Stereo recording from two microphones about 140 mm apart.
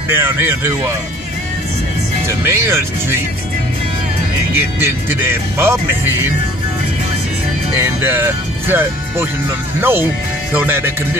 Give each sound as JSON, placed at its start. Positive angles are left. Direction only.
{"t": 0.1, "sound": "speech", "side_deg": -15}
{"t": 2.2, "sound": "speech", "side_deg": -20}
{"t": 4.6, "sound": "speech", "side_deg": -15}
{"t": 7.7, "sound": "speech", "side_deg": -15}